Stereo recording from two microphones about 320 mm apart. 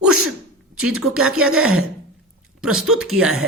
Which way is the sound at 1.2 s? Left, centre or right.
Right.